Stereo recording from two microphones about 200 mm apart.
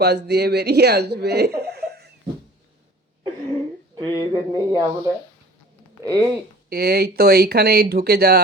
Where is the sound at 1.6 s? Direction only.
55° right (ahead or behind).